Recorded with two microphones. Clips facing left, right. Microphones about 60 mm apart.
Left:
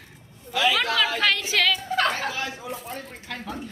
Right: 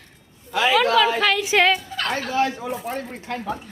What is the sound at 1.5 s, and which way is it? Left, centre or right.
Speech, right.